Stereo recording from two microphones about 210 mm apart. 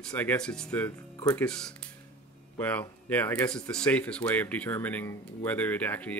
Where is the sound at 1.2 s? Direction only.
15° left (ahead or behind).